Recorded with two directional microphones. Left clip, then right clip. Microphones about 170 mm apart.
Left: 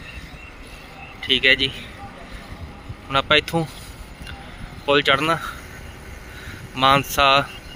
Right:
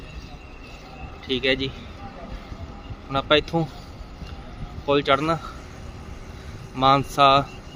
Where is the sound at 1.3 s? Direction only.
10° right (ahead or behind).